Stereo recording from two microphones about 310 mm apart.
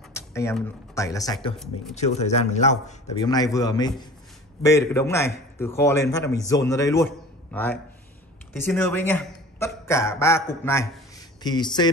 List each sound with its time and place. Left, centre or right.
0.1 s a man's voice: centre